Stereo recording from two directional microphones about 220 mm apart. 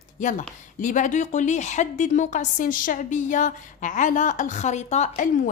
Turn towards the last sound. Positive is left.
turn(degrees=35)  # may be behind; listen again after turning